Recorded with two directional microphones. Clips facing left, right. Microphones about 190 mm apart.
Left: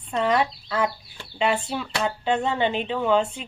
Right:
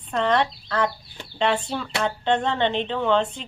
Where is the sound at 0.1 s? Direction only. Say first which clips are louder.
Even; 5° left (ahead or behind).